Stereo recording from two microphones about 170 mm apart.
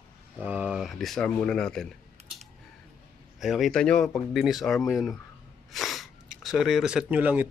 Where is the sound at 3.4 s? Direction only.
Centre (ahead or behind).